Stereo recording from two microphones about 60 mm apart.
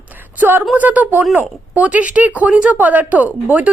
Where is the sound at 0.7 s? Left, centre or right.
Right.